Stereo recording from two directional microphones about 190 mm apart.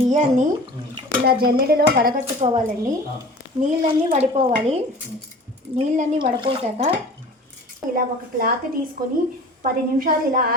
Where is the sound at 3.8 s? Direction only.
30° right (ahead or behind).